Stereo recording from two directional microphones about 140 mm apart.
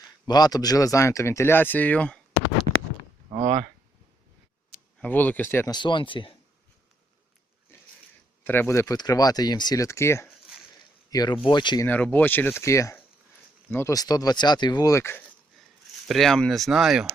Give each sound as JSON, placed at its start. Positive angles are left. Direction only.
{"t": 0.3, "sound": "speech", "side_deg": 30}
{"t": 3.4, "sound": "speech", "side_deg": -60}
{"t": 4.9, "sound": "speech", "side_deg": 10}
{"t": 5.7, "sound": "speech", "side_deg": 35}
{"t": 8.4, "sound": "speech", "side_deg": 15}
{"t": 11.9, "sound": "speech", "side_deg": 10}
{"t": 16.0, "sound": "speech", "side_deg": 0}